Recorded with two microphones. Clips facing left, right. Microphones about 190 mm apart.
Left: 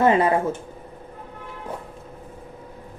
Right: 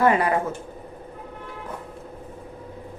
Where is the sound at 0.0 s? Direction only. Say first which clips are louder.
Left 2 dB; 25° left (ahead or behind).